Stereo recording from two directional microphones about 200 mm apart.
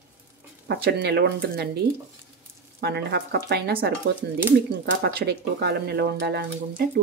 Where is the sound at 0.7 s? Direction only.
55° right (ahead or behind).